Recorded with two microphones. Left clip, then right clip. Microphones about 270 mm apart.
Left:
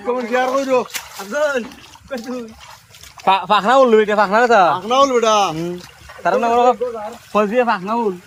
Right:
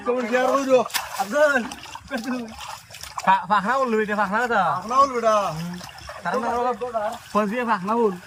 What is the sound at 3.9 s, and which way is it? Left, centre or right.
A man's voice, left.